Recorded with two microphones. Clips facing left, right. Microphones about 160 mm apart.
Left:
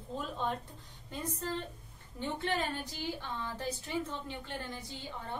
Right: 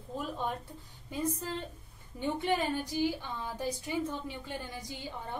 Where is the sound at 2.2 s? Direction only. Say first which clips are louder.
Right 4 dB; 10° right (ahead or behind).